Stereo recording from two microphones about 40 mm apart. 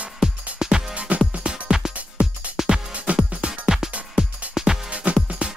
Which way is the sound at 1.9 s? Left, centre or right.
Right.